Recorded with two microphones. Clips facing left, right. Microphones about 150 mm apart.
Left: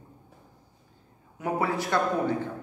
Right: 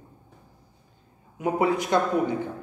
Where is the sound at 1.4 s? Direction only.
20° right (ahead or behind).